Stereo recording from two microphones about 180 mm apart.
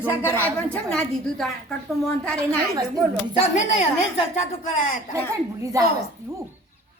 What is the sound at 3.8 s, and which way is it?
A woman's voice, 35° left (ahead or behind).